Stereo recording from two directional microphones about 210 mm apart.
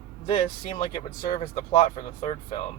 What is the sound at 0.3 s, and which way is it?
Speech, 25° left (ahead or behind).